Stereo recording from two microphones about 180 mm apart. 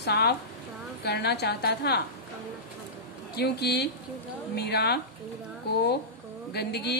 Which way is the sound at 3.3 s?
65° left (ahead or behind).